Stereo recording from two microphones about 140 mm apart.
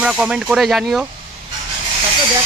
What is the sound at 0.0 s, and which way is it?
Speech, 5° right (ahead or behind).